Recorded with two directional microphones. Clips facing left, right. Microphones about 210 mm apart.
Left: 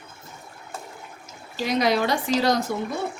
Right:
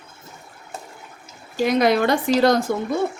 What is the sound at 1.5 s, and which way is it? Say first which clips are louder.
Speech: right 4 dB; 55° right (ahead or behind).